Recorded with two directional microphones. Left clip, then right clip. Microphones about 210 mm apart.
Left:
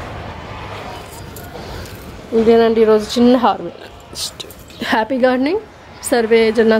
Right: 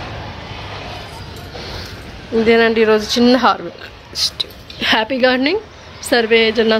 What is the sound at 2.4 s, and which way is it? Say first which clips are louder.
A woman's voice: left 1 dB; 10° left (ahead or behind).